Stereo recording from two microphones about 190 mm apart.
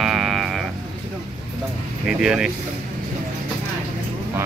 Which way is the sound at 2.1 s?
5° right (ahead or behind).